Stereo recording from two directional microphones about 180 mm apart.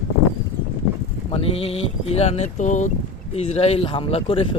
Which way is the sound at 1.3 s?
30° left (ahead or behind).